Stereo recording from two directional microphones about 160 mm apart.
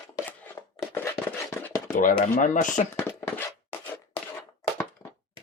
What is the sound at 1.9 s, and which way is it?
Speech, 55° left (ahead or behind).